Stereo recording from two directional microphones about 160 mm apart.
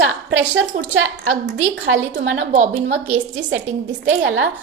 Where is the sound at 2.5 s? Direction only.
50° right (ahead or behind).